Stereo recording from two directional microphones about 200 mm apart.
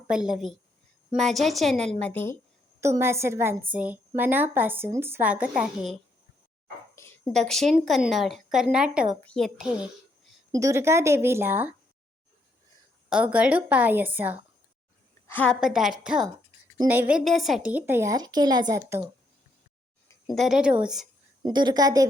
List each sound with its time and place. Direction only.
0.1 s a woman's voice: 5° right (ahead or behind)
2.8 s a woman's voice: 15° right (ahead or behind)
6.9 s a sound: 15° left (ahead or behind)
7.3 s speech: centre (ahead or behind)
10.5 s a woman's voice: 15° right (ahead or behind)
13.1 s a woman's voice: 5° right (ahead or behind)
15.3 s a woman's voice: 10° left (ahead or behind)
15.6 s speech: centre (ahead or behind)
16.7 s a woman's voice: 15° right (ahead or behind)
20.2 s speech: centre (ahead or behind)
21.4 s a woman's voice: 20° right (ahead or behind)